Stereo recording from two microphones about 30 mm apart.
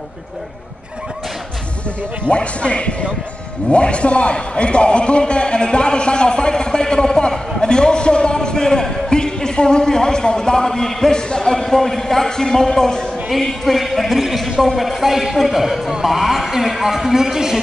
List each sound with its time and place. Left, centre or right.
2.2 s a man's voice: left; by 11.1 s centre
11.1 s a man's voice: left
13.7 s speech: centre